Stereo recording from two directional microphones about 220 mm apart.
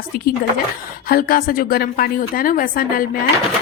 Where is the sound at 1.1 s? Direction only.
40° left (ahead or behind).